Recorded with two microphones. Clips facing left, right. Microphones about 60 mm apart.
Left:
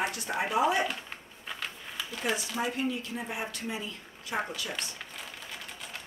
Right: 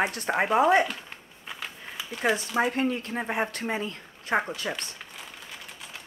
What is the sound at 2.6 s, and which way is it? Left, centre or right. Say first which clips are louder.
Speech: right 6 dB; right.